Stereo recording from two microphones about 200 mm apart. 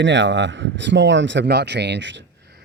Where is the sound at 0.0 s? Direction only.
65° right (ahead or behind).